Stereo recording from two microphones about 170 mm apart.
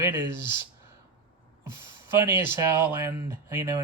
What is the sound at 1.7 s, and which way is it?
Speech, 15° right (ahead or behind).